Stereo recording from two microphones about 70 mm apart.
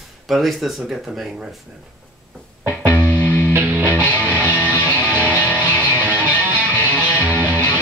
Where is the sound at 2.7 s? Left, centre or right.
Right.